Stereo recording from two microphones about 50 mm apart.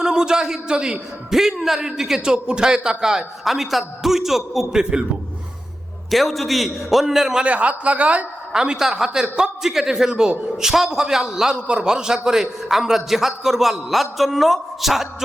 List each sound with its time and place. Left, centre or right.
0.0 s a man's voice: centre
6.1 s a man's voice: centre
7.4 s speech: right
8.5 s a man's voice: centre